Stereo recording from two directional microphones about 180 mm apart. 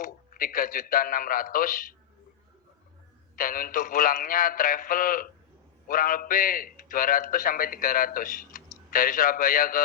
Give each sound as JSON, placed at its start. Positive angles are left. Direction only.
{"t": 0.0, "sound": "a man's voice", "side_deg": 50}
{"t": 3.3, "sound": "a man's voice", "side_deg": 50}